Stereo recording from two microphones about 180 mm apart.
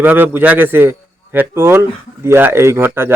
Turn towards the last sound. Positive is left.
turn(degrees=-15)  # may be behind; listen again after turning